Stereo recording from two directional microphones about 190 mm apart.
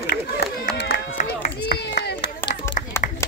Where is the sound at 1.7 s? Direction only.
60° left (ahead or behind).